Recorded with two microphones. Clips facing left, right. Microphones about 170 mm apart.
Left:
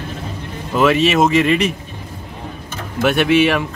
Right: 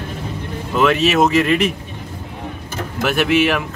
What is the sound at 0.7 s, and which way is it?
Speech, centre (ahead or behind).